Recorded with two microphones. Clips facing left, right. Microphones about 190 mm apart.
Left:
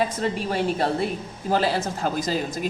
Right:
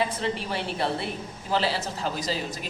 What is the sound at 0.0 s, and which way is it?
A woman's voice, 45° left (ahead or behind).